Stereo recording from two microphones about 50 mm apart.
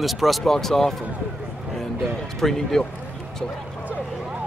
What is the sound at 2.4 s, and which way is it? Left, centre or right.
Speech, centre.